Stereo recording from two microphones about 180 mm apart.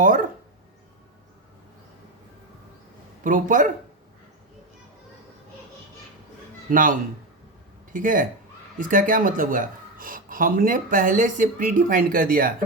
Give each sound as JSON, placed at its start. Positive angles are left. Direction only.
{"t": 3.2, "sound": "speech", "side_deg": -45}
{"t": 6.7, "sound": "speech", "side_deg": -50}